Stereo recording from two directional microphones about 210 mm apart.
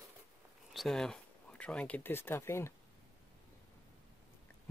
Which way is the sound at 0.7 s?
Centre (ahead or behind).